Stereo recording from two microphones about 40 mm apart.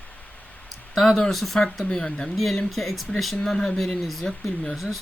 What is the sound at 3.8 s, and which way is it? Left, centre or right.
Speech, centre.